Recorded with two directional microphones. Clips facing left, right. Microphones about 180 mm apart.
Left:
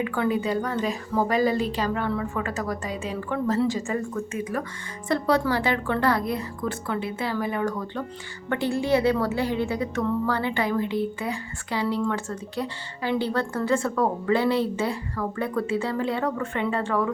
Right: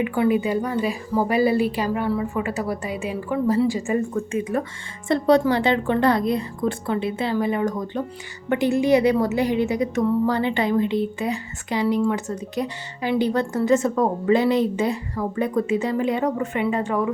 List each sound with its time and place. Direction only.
0.0 s a woman's voice: 15° right (ahead or behind)